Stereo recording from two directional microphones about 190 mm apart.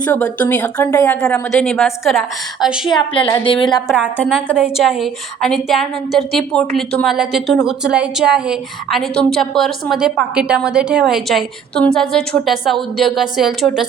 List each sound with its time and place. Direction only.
0.0 s speech: 5° left (ahead or behind)
2.9 s a woman's voice: 25° left (ahead or behind)
3.8 s a woman's voice: 5° right (ahead or behind)
4.2 s a woman's voice: 5° left (ahead or behind)